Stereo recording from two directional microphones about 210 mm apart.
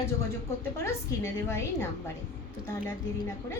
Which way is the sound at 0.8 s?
15° left (ahead or behind).